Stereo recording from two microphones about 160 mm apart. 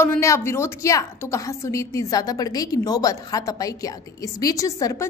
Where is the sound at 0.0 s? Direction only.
15° left (ahead or behind).